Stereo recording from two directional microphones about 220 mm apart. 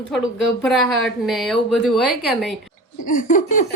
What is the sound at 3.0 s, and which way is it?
Speech, 35° left (ahead or behind).